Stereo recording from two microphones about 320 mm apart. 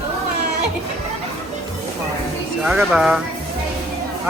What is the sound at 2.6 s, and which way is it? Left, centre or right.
Speech, centre.